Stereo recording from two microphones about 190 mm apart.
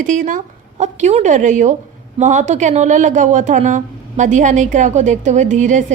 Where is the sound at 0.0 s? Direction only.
40° right (ahead or behind).